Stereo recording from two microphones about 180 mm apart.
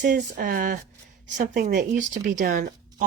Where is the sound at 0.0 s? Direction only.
50° right (ahead or behind).